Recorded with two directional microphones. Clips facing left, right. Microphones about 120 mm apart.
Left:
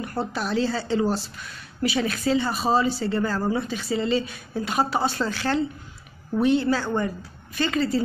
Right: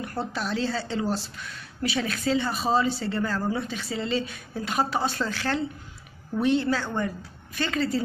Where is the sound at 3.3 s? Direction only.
30° left (ahead or behind).